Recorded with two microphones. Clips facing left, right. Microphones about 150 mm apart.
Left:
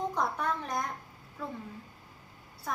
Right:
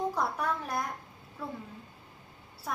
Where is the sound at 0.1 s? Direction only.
5° right (ahead or behind).